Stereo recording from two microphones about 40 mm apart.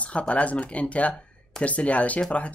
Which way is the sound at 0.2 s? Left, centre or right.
Left.